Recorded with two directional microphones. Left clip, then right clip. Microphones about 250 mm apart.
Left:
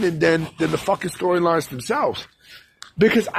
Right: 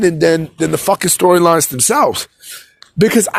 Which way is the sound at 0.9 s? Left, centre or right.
Right.